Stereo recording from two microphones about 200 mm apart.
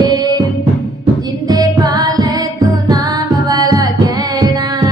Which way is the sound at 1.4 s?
20° right (ahead or behind).